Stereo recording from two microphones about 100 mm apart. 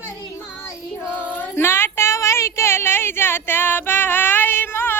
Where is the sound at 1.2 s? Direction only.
20° left (ahead or behind).